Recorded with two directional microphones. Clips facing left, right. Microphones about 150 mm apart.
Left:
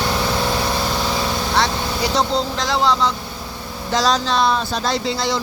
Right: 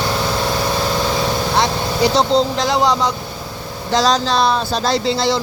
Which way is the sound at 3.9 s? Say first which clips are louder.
Right 3 dB; 35° right (ahead or behind).